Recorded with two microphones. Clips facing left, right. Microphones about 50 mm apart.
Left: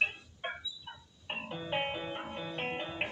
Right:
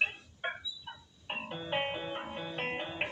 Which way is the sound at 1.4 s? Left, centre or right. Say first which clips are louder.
Even; right.